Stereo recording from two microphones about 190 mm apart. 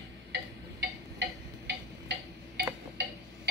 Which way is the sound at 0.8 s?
60° right (ahead or behind).